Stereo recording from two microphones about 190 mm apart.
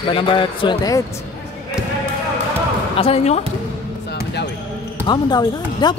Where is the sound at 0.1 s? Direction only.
25° left (ahead or behind).